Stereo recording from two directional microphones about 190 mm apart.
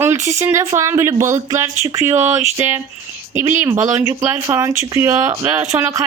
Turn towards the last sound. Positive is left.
turn(degrees=-15)  # may be behind; listen again after turning